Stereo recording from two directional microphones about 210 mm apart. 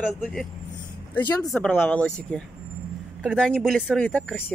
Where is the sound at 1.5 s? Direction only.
5° left (ahead or behind).